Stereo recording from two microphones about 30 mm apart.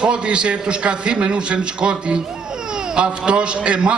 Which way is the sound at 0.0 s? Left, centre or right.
Right.